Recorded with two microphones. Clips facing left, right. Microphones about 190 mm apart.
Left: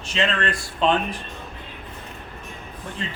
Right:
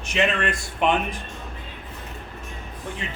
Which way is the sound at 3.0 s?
15° right (ahead or behind).